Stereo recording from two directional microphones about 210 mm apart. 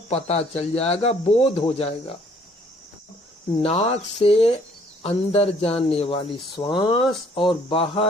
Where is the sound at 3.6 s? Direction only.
30° left (ahead or behind).